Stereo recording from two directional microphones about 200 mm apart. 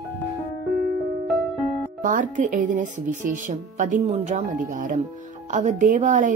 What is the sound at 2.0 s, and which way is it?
A woman's voice, 40° right (ahead or behind).